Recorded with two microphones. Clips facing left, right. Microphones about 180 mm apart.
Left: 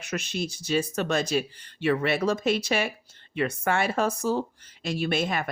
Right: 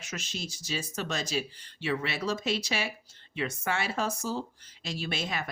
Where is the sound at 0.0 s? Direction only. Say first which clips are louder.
Left 8 dB; 60° left (ahead or behind).